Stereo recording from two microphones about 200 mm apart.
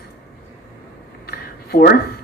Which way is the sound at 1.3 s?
50° left (ahead or behind).